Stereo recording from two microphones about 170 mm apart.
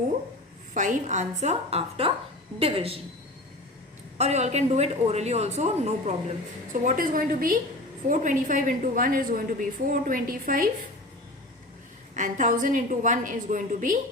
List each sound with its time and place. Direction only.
0.7 s a woman's voice: 45° right (ahead or behind)
4.2 s a woman's voice: 40° right (ahead or behind)
12.1 s a woman's voice: 45° right (ahead or behind)